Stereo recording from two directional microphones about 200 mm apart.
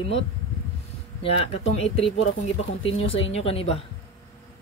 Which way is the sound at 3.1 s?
30° left (ahead or behind).